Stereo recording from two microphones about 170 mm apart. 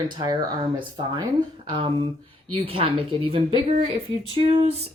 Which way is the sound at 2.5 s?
35° right (ahead or behind).